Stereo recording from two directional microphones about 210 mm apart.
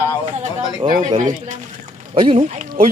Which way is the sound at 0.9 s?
35° right (ahead or behind).